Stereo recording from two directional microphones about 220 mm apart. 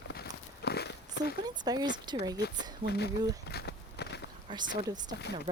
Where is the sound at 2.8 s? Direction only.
40° right (ahead or behind).